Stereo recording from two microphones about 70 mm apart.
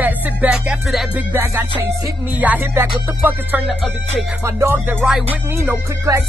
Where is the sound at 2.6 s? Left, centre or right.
Right.